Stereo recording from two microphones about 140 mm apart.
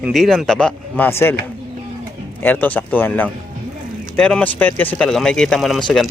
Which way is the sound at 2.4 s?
10° left (ahead or behind).